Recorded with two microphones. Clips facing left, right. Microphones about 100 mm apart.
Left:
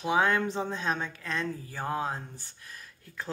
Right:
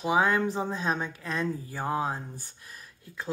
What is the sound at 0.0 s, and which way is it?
Speech, 10° right (ahead or behind).